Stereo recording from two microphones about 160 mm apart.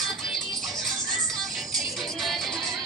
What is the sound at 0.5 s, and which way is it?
Music, centre (ahead or behind).